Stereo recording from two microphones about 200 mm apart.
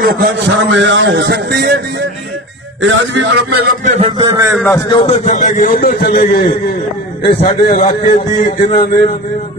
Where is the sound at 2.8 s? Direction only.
75° right (ahead or behind).